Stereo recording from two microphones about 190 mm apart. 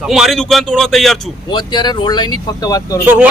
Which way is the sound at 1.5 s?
25° left (ahead or behind).